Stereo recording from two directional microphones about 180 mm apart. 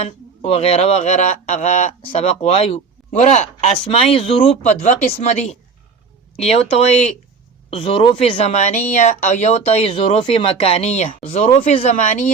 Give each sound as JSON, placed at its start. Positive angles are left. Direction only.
{"t": 0.0, "sound": "speech", "side_deg": 35}